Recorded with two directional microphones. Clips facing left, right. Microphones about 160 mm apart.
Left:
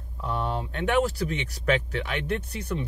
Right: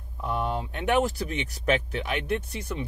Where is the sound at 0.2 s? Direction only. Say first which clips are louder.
Right 1 dB; 15° right (ahead or behind).